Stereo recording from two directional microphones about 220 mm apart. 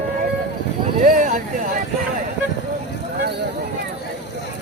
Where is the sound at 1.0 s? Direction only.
35° right (ahead or behind).